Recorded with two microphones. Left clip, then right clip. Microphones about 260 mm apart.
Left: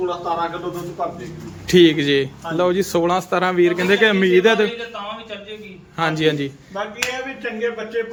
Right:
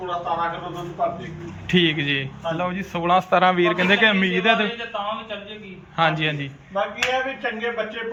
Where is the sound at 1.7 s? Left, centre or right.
Centre.